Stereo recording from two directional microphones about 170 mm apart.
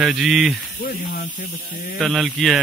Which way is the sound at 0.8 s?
60° left (ahead or behind).